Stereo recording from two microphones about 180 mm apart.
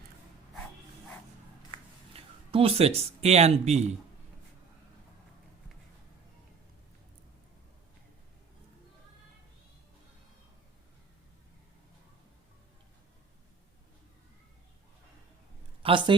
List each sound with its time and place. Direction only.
2.1 s speech: 30° right (ahead or behind)
15.8 s a woman's voice: 30° right (ahead or behind)